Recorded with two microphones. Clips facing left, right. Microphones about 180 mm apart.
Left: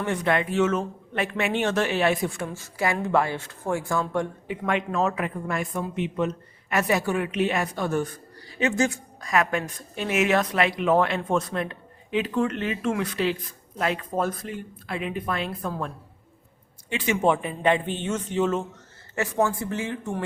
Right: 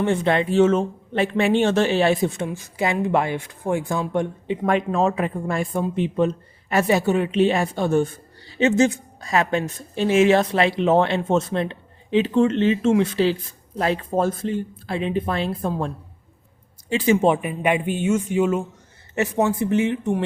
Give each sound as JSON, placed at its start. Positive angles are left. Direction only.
{"t": 0.0, "sound": "speech", "side_deg": -25}
{"t": 4.6, "sound": "speech", "side_deg": -35}
{"t": 16.9, "sound": "speech", "side_deg": -30}
{"t": 17.2, "sound": "speech", "side_deg": -15}
{"t": 19.1, "sound": "speech", "side_deg": -20}